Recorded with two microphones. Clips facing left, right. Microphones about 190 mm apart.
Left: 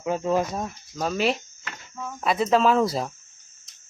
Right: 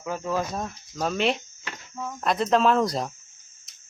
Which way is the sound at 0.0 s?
20° left (ahead or behind).